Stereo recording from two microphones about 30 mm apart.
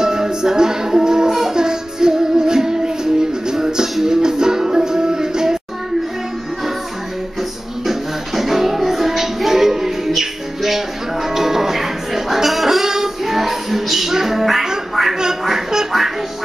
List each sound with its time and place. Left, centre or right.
0.0 s music: right
7.8 s music: centre
15.4 s quack: centre